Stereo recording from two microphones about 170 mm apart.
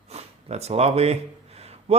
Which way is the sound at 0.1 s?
40° right (ahead or behind).